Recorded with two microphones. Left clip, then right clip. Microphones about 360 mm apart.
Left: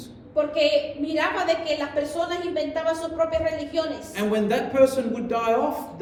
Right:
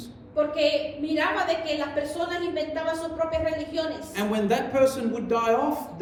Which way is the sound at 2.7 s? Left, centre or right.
Left.